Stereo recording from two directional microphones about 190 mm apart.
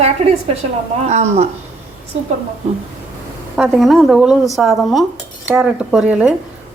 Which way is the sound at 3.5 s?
Centre (ahead or behind).